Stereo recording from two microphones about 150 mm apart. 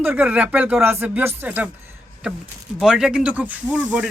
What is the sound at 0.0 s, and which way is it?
Speech, 10° right (ahead or behind).